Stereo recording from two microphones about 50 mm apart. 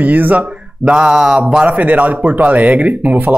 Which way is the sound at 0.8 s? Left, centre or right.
Centre.